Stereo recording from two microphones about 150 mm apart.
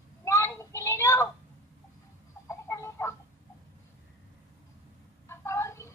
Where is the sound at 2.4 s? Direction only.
20° left (ahead or behind).